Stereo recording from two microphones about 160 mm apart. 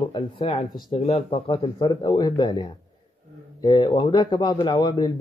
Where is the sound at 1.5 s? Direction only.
30° left (ahead or behind).